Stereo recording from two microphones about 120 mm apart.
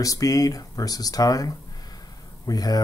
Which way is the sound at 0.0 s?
30° left (ahead or behind).